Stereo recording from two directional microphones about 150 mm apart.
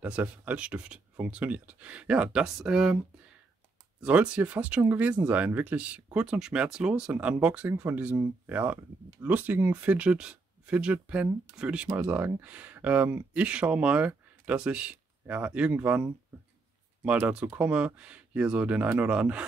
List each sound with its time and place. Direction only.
0.0 s speech: 10° right (ahead or behind)
4.0 s speech: 10° right (ahead or behind)